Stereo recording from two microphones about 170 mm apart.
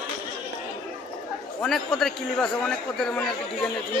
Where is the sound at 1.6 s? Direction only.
Centre (ahead or behind).